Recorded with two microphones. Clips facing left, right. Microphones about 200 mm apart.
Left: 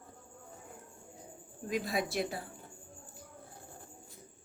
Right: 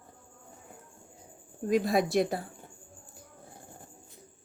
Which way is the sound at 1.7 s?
45° right (ahead or behind).